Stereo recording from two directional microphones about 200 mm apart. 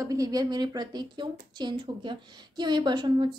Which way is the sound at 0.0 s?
15° right (ahead or behind).